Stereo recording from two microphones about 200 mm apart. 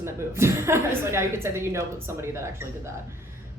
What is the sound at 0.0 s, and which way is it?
A woman's voice, 15° right (ahead or behind).